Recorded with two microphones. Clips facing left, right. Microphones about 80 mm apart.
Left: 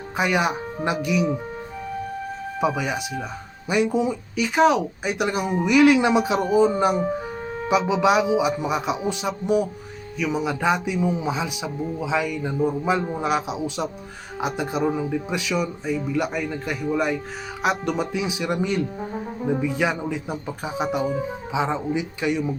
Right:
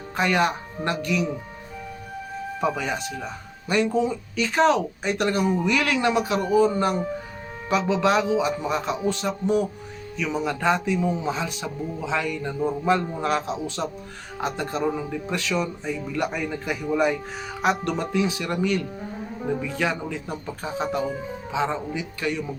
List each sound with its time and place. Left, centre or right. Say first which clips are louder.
0.2 s speech: even; centre
2.6 s speech: left 2 dB; centre